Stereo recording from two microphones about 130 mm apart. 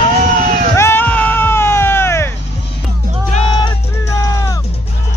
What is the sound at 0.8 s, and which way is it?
Sheep, 15° left (ahead or behind).